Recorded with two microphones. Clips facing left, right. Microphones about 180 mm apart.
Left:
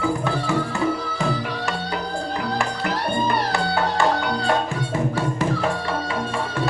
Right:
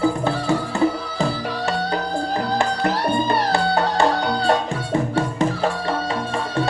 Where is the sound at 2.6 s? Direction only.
30° right (ahead or behind).